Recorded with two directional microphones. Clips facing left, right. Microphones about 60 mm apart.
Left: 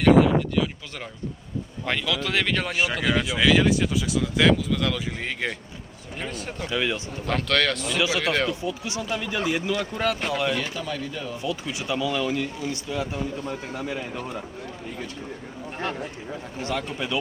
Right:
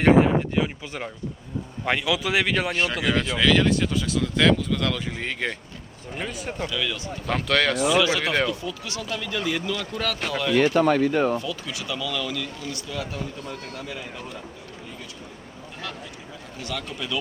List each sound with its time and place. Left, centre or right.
0.0 s speech: right; by 2.7 s centre
2.7 s speech: centre
6.7 s speech: left
7.3 s speech: centre
8.4 s speech: centre
10.5 s speech: right
11.4 s speech: left
16.6 s speech: left